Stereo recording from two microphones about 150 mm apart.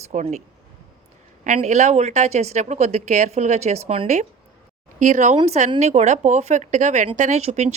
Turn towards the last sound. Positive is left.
turn(degrees=-45)  # may be behind; listen again after turning